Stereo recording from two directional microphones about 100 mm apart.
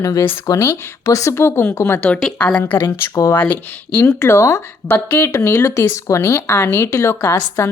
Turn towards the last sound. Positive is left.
turn(degrees=25)  # may be behind; listen again after turning